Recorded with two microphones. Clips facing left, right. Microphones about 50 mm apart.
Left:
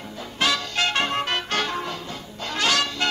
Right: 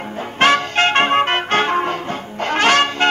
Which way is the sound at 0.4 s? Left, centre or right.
Right.